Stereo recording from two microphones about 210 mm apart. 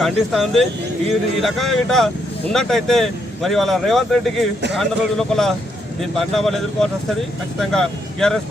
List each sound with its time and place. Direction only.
0.0 s speech: centre (ahead or behind)